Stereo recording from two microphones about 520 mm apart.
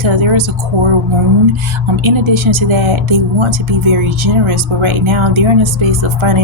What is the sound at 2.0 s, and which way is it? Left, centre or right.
Speech, right.